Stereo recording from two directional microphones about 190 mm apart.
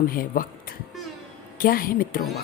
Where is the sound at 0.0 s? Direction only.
50° left (ahead or behind).